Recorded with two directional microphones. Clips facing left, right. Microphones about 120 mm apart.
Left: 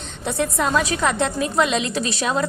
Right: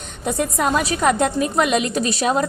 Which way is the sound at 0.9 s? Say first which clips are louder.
Right 3 dB; 45° right (ahead or behind).